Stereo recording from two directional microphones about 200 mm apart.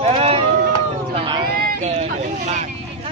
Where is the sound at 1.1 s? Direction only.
25° right (ahead or behind).